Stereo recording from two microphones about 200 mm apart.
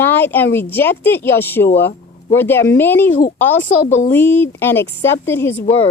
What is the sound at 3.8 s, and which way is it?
Speech, 35° left (ahead or behind).